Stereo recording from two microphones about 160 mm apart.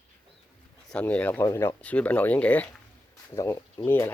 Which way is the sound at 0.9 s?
10° left (ahead or behind).